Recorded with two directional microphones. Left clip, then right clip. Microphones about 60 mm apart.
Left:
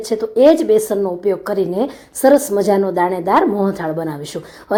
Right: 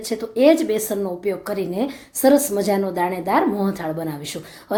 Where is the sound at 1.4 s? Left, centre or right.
Left.